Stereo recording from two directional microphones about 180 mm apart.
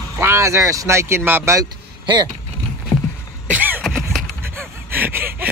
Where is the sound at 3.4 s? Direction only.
10° right (ahead or behind).